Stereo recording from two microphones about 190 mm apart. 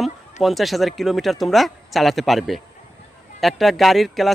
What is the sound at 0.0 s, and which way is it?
Speech, centre (ahead or behind).